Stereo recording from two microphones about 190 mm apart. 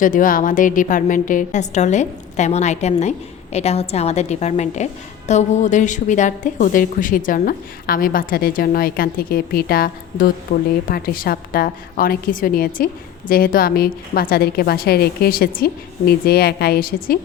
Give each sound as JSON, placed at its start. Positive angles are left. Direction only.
{"t": 0.0, "sound": "a woman's voice", "side_deg": 45}